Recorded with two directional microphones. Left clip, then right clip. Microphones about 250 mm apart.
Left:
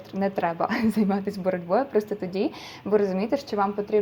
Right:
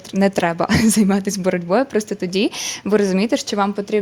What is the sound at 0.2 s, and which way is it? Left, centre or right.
Speech, right.